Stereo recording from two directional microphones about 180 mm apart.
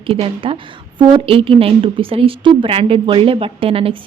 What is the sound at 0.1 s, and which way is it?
A woman's voice, 30° right (ahead or behind).